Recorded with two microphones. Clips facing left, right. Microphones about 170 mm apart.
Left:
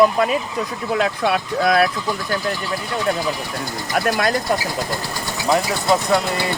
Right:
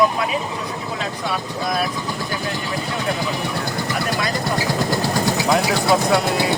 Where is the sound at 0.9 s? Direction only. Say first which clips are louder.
Left 8 dB; 65° left (ahead or behind).